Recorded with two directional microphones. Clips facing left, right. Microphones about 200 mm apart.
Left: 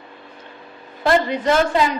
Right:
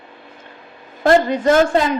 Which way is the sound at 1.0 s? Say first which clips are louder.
Right 4 dB; 45° right (ahead or behind).